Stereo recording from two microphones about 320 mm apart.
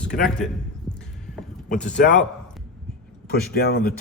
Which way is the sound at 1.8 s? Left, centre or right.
Left.